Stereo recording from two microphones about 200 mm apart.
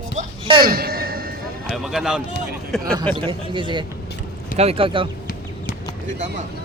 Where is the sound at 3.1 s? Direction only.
25° right (ahead or behind).